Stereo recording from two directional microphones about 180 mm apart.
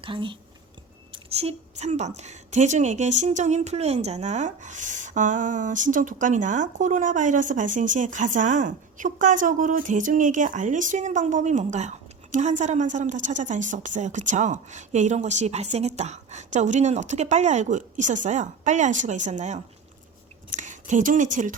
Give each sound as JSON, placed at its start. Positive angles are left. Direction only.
{"t": 0.0, "sound": "a woman's voice", "side_deg": -30}